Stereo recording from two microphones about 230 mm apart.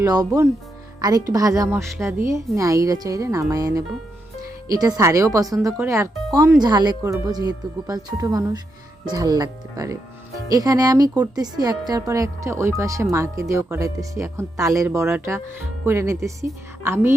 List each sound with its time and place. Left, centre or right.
0.0 s speech: centre